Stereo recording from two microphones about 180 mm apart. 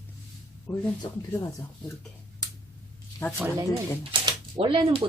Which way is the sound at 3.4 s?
15° right (ahead or behind).